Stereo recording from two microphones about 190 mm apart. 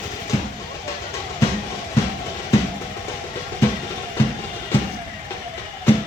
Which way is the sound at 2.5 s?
15° left (ahead or behind).